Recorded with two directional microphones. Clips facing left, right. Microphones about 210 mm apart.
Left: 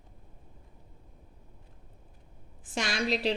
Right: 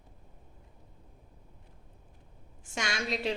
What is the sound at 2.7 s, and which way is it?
Speech, 35° left (ahead or behind).